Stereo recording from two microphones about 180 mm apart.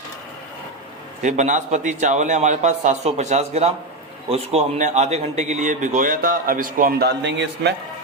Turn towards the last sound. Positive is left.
turn(degrees=-75)  # may be behind; listen again after turning